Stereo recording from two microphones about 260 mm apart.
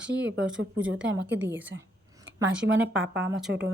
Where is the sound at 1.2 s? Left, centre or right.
Right.